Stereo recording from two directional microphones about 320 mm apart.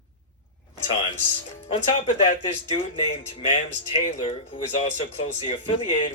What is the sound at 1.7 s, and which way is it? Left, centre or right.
Speech, left.